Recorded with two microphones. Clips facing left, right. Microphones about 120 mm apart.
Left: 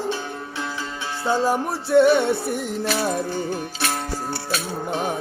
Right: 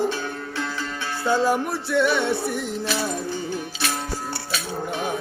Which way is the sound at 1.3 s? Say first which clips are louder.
Even; 40° left (ahead or behind).